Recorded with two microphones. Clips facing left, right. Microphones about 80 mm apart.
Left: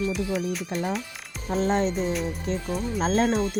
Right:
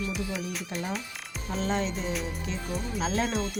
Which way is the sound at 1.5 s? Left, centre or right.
Left.